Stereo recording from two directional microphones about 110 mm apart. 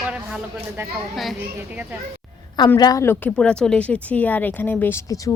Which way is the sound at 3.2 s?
15° left (ahead or behind).